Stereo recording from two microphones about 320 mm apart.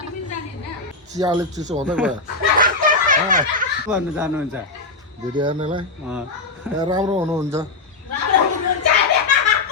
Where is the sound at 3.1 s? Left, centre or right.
Right.